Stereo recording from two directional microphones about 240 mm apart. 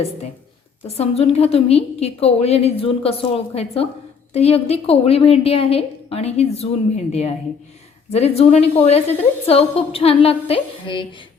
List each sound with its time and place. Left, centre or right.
0.9 s a woman's voice: left